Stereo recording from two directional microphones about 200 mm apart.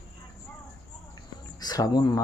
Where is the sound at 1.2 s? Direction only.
20° left (ahead or behind).